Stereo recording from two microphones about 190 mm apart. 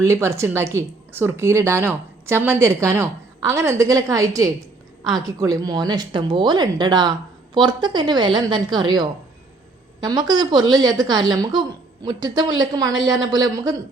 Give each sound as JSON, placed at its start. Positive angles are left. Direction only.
{"t": 0.0, "sound": "a woman's voice", "side_deg": -15}